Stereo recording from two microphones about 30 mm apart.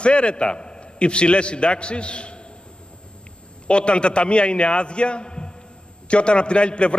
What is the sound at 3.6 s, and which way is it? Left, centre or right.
A man's voice, left.